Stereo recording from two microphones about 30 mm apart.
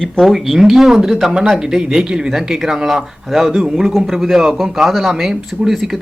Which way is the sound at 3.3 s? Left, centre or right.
Centre.